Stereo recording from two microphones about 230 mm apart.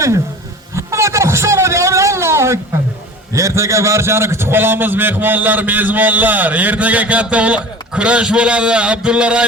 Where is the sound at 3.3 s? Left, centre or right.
Centre.